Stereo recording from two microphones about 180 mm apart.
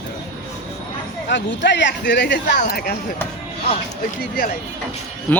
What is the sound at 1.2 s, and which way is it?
Speech, 80° left.